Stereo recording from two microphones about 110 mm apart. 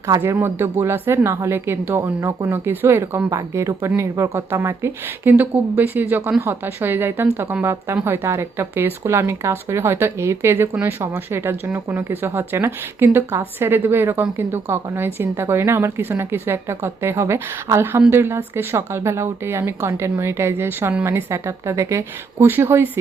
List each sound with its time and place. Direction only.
0.2 s speech: 20° right (ahead or behind)